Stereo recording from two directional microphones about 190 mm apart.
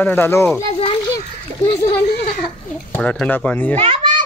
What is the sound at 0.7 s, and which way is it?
Children playing, 30° left (ahead or behind).